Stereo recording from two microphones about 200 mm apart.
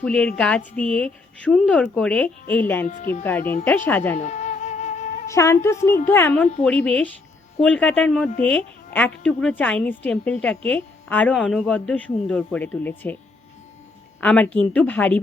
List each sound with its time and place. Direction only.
0.0 s speech: 5° left (ahead or behind)
2.8 s speech: 40° left (ahead or behind)
3.2 s a woman's voice: 10° left (ahead or behind)
4.2 s music: 35° left (ahead or behind)
5.3 s a woman's voice: 15° left (ahead or behind)
14.2 s a woman's voice: 5° left (ahead or behind)